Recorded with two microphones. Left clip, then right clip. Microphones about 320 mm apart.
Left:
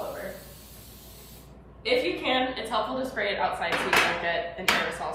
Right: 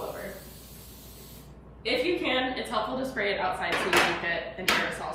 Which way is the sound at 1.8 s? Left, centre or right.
Centre.